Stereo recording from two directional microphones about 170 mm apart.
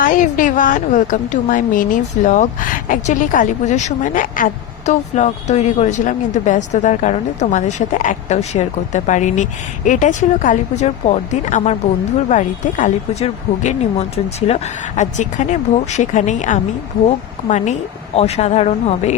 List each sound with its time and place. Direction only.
0.0 s a woman's voice: 50° left (ahead or behind)